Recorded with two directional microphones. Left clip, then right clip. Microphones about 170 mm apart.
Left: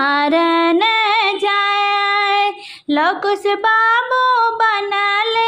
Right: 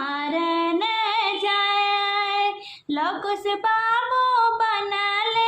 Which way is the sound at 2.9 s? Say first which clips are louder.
Left 9 dB; 40° left (ahead or behind).